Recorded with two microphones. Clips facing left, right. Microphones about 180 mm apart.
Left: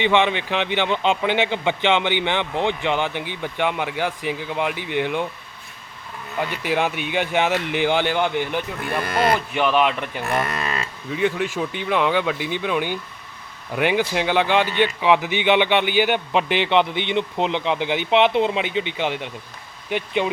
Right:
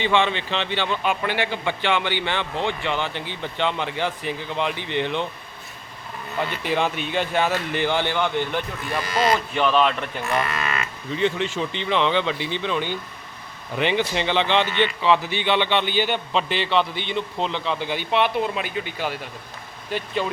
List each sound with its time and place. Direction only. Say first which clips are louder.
0.0 s a man's voice: left 2 dB; 15° left (ahead or behind)
6.4 s a man's voice: left 1 dB; 10° left (ahead or behind)
8.8 s speech: left 2 dB; 55° left (ahead or behind)
9.6 s a man's voice: even; 10° left (ahead or behind)
10.2 s moo: left 1 dB; 50° left (ahead or behind)
10.5 s cattle: left 1 dB; 35° left (ahead or behind)
11.1 s a man's voice: left 1 dB; 10° left (ahead or behind)